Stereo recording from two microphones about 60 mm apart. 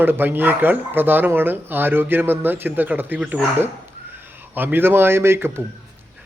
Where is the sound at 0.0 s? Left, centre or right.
Right.